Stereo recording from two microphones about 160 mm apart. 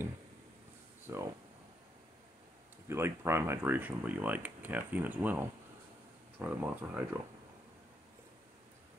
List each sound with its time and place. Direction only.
1.1 s speech: 15° right (ahead or behind)
2.9 s speech: 15° right (ahead or behind)